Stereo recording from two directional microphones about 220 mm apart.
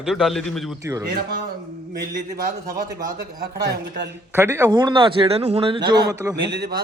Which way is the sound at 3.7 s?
50° right (ahead or behind).